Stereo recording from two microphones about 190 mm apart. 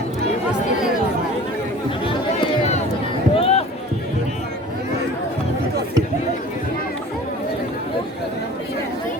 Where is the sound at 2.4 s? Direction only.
35° left (ahead or behind).